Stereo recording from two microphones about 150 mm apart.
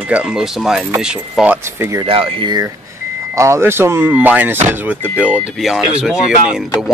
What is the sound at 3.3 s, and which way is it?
Speech, 20° right (ahead or behind).